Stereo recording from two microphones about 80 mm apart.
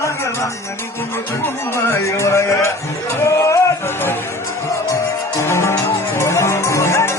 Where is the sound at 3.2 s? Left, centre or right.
Left.